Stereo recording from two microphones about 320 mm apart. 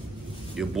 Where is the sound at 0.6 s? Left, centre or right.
Centre.